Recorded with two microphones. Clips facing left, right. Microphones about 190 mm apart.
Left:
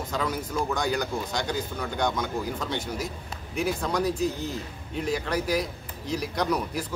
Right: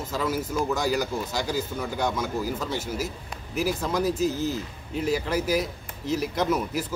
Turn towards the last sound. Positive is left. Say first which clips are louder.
# right 2 dB
turn(degrees=-5)  # may be behind; listen again after turning